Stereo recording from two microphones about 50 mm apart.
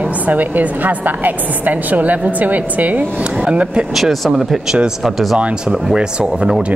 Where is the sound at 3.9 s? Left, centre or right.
Centre.